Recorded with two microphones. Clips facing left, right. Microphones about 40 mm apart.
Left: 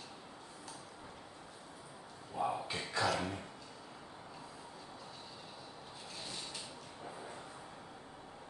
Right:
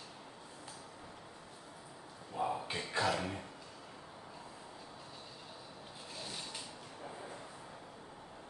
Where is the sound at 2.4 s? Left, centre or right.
Centre.